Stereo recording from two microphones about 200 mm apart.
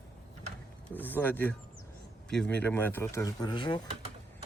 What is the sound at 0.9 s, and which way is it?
Speech, 10° left (ahead or behind).